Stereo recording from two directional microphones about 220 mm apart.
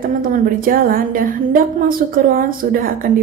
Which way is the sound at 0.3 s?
40° right (ahead or behind).